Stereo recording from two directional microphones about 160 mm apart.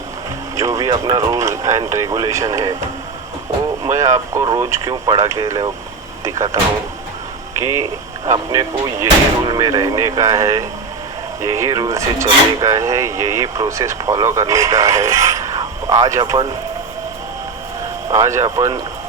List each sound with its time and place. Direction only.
0.5 s speech: 20° right (ahead or behind)
3.8 s speech: 20° right (ahead or behind)
7.6 s speech: 20° right (ahead or behind)
18.1 s speech: 20° right (ahead or behind)